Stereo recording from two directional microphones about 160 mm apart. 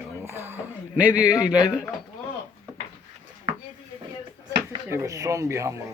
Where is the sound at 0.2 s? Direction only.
15° right (ahead or behind).